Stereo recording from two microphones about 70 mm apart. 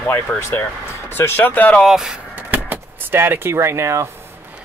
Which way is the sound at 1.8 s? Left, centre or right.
Centre.